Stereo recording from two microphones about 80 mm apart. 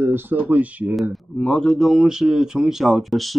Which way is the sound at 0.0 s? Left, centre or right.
Right.